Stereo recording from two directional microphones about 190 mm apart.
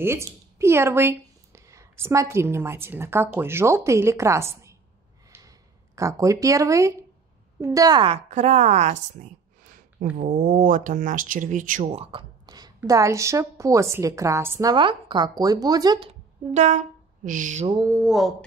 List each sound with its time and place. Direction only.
0.0 s speech: 15° right (ahead or behind)
5.3 s a sound: 10° right (ahead or behind)
5.9 s a woman's voice: 15° right (ahead or behind)
16.1 s speech: 40° right (ahead or behind)
17.9 s speech: 5° right (ahead or behind)